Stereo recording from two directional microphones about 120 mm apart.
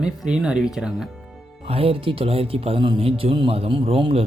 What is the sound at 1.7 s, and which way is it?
Speech, 55° right (ahead or behind).